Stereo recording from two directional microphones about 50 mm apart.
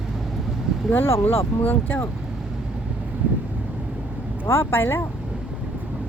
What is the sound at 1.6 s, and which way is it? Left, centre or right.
Speech, left.